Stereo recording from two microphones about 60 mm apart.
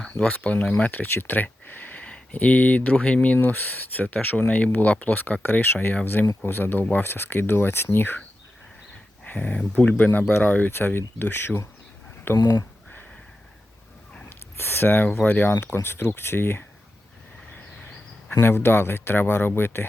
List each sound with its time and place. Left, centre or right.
0.2 s speech: left
3.3 s speech: left
9.2 s speech: left
10.7 s speech: left
12.2 s speech: left
14.3 s a sound: left
15.3 s speech: left
18.3 s speech: left